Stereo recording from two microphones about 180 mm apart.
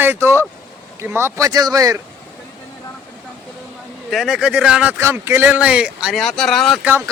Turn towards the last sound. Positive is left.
turn(degrees=0)  # may be behind; listen again after turning